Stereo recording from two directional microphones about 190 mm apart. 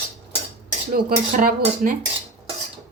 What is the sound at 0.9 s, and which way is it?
Speech, 50° right (ahead or behind).